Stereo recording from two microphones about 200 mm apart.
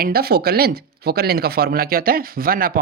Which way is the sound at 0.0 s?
50° right (ahead or behind).